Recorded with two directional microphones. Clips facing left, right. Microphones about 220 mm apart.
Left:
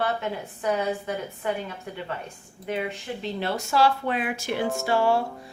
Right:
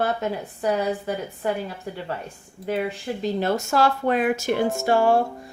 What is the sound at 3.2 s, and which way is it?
Speech, 45° right (ahead or behind).